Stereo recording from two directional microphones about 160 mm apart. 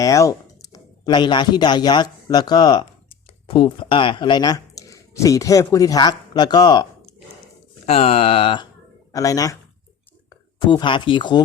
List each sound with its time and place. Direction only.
0.0 s speech: 20° left (ahead or behind)
7.9 s speech: 40° left (ahead or behind)
9.1 s speech: 20° left (ahead or behind)